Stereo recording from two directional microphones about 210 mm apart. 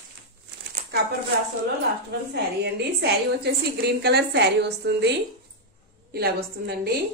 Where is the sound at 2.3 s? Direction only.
50° right (ahead or behind).